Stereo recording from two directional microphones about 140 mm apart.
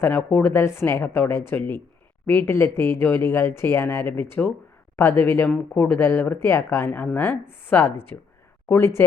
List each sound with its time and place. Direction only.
0.0 s speech: 15° left (ahead or behind)